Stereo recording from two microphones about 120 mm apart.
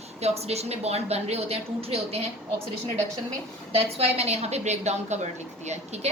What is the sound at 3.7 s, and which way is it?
A woman's voice, 60° right (ahead or behind).